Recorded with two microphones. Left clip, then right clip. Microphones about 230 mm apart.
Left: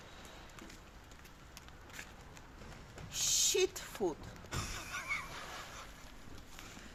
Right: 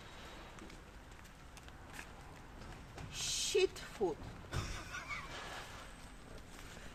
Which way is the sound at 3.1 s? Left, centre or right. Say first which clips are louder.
Left 3 dB; left.